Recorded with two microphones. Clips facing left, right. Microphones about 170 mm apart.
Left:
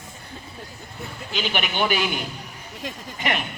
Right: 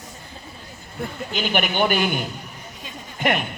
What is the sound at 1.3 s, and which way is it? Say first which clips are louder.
Speech: right 3 dB; 50° right (ahead or behind).